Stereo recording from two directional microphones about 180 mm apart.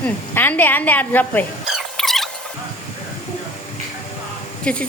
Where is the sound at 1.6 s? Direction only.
Centre (ahead or behind).